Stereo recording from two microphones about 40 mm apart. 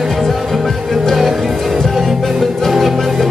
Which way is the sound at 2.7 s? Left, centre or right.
Centre.